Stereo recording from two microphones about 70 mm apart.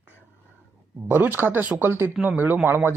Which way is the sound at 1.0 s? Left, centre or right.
Right.